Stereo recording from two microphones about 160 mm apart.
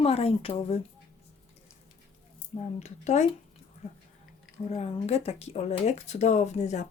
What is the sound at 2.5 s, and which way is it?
Speech, 45° left (ahead or behind).